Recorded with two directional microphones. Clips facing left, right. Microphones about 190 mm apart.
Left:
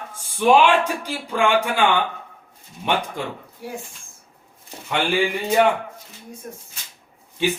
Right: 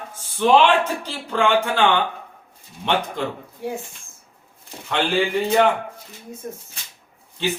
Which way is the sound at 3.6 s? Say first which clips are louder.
Right 5 dB; 25° right (ahead or behind).